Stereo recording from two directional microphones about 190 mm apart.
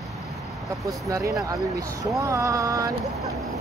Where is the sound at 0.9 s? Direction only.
15° right (ahead or behind).